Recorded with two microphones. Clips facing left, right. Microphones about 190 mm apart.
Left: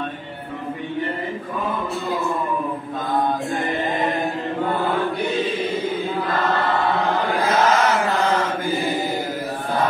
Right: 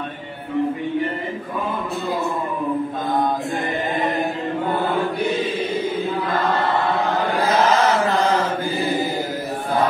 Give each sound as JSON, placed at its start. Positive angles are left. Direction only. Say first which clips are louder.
{"t": 7.6, "sound": "chant", "louder": "right 1 dB", "side_deg": -30}